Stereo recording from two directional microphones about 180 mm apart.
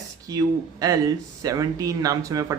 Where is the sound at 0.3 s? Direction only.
20° right (ahead or behind).